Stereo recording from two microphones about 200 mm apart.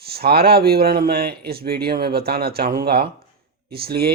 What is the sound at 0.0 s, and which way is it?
Speech, 50° right (ahead or behind).